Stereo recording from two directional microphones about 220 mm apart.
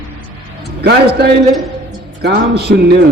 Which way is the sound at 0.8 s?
45° right (ahead or behind).